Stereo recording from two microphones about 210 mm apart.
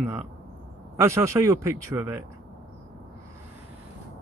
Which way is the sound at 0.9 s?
15° right (ahead or behind).